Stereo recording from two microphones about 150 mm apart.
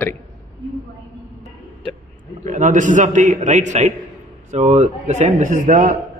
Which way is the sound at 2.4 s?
55° right (ahead or behind).